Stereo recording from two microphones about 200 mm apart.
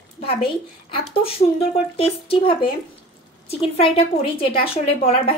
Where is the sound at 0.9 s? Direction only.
30° left (ahead or behind).